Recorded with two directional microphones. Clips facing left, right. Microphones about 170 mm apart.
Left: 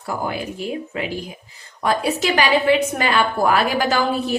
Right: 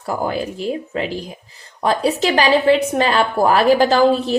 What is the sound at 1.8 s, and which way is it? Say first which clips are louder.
A woman's voice: right 3 dB; 30° right (ahead or behind).